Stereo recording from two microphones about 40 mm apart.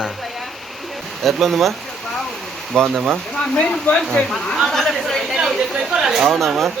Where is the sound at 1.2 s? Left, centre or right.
Centre.